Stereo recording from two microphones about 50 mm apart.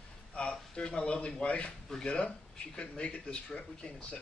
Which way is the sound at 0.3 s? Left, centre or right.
Left.